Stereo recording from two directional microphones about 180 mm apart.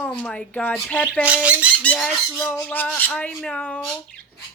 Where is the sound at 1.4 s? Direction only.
5° right (ahead or behind).